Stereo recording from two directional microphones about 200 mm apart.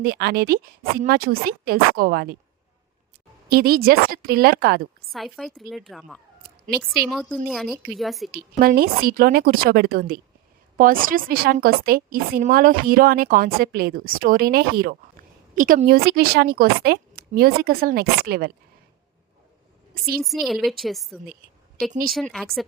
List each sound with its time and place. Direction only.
0.0 s a woman's voice: 50° right (ahead or behind)
3.5 s a woman's voice: 50° right (ahead or behind)
5.1 s a woman's voice: centre (ahead or behind)
8.5 s a woman's voice: 45° right (ahead or behind)
20.2 s a woman's voice: centre (ahead or behind)